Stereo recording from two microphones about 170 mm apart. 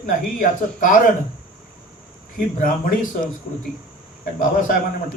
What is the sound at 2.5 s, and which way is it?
Speech, 55° left (ahead or behind).